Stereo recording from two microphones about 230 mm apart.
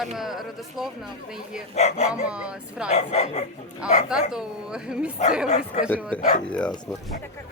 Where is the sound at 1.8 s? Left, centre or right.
Left.